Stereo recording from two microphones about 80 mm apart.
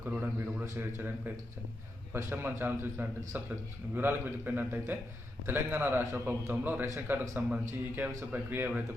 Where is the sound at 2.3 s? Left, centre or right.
Right.